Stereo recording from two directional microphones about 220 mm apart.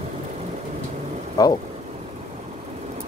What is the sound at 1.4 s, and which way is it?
Speech, 15° left (ahead or behind).